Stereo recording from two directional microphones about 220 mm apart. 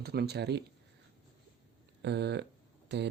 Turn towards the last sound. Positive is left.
turn(degrees=-50)  # may be behind; listen again after turning